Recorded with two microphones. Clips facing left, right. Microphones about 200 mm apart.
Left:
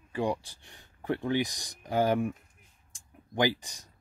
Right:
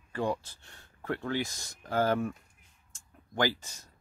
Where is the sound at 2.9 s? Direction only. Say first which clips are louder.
Left 2 dB; 15° left (ahead or behind).